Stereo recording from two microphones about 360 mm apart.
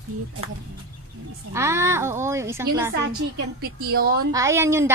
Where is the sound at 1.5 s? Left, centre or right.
Centre.